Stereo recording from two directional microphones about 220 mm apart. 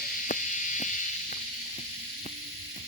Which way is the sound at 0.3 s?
35° left (ahead or behind).